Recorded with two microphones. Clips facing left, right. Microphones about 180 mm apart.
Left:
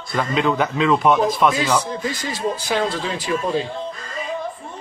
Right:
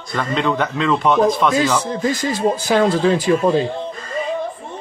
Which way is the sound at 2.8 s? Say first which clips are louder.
Right 8 dB; 50° right (ahead or behind).